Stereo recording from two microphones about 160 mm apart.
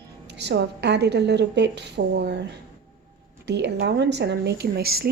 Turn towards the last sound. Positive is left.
turn(degrees=-75)  # may be behind; listen again after turning